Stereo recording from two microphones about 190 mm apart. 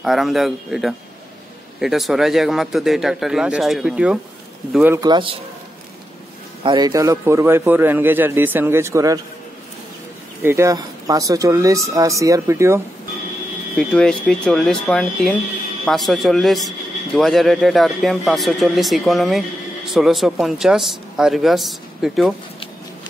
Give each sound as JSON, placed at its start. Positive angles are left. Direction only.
{"t": 0.0, "sound": "a man's voice", "side_deg": 0}
{"t": 5.0, "sound": "a man's voice", "side_deg": -25}
{"t": 6.6, "sound": "a man's voice", "side_deg": -20}
{"t": 10.4, "sound": "a man's voice", "side_deg": -15}
{"t": 13.7, "sound": "a man's voice", "side_deg": 5}